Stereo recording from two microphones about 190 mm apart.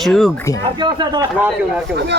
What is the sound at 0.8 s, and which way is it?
Speech, 25° right (ahead or behind).